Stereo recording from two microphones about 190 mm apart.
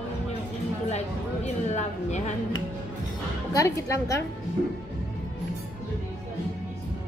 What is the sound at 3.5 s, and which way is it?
Speech, 15° left (ahead or behind).